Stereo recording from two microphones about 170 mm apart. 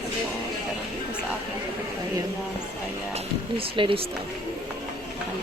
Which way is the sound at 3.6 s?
30° right (ahead or behind).